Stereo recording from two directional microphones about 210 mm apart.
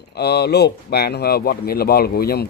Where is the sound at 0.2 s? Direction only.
50° left (ahead or behind).